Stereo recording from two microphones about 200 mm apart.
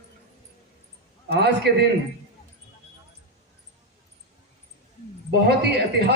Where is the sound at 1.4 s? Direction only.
55° right (ahead or behind).